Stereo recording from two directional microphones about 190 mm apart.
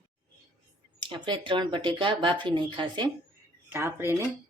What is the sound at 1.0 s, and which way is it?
Speech, 25° right (ahead or behind).